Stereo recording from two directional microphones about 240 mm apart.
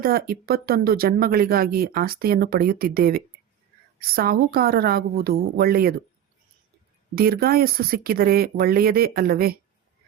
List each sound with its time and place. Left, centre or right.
0.0 s speech: right
7.2 s speech: right